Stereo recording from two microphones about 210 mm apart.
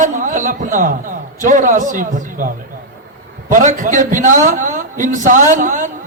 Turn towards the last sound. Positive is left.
turn(degrees=-40)  # may be behind; listen again after turning